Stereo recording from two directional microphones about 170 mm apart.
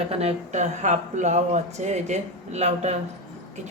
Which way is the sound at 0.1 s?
35° right (ahead or behind).